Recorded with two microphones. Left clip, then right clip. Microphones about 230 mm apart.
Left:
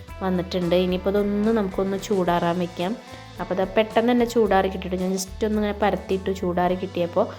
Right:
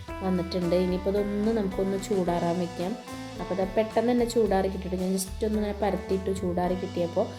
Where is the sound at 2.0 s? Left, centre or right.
Centre.